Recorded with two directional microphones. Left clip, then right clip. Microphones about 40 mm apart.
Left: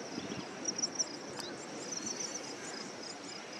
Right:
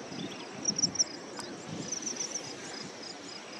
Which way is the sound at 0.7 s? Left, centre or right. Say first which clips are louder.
Right 7 dB; right.